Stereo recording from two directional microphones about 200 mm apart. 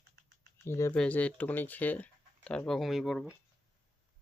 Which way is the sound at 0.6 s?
10° left (ahead or behind).